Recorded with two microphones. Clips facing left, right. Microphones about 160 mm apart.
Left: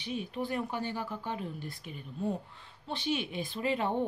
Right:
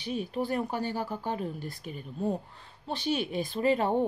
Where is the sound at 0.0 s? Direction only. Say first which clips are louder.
Right 4 dB; 40° right (ahead or behind).